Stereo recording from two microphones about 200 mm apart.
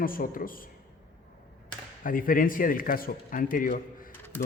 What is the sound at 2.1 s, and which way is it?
A man's voice, 45° left (ahead or behind).